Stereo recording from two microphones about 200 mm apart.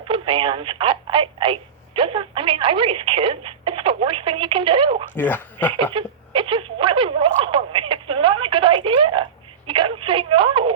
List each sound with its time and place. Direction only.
0.1 s speech: 25° right (ahead or behind)
5.1 s speech: 10° left (ahead or behind)
5.7 s speech: 25° right (ahead or behind)